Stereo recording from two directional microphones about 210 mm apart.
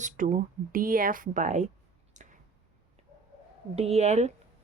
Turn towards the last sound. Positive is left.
turn(degrees=-35)  # may be behind; listen again after turning